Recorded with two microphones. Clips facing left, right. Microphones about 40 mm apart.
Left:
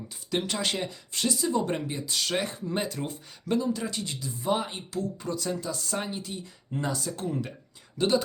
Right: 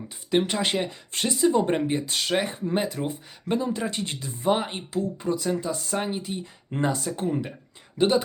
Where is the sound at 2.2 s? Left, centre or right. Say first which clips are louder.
Right 4 dB; right.